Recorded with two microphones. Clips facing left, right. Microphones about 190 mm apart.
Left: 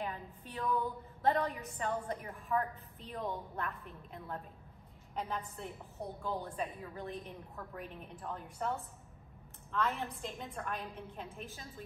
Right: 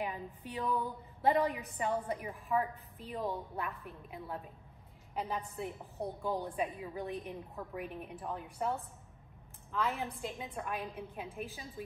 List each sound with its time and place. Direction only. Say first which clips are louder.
0.0 s a woman's voice: right 2 dB; 15° right (ahead or behind)
6.2 s a woman's voice: right 3 dB; 15° right (ahead or behind)